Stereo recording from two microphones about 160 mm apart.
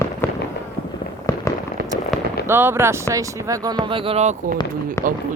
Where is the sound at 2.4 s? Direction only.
15° right (ahead or behind).